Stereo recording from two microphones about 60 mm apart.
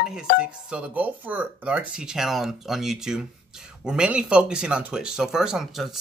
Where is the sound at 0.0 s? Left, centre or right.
Centre.